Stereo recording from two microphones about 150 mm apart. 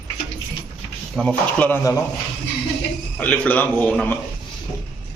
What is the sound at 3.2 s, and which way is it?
Speech, 10° left (ahead or behind).